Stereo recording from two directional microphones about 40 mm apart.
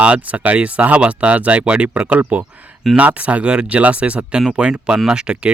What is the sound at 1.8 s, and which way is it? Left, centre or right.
Speech, right.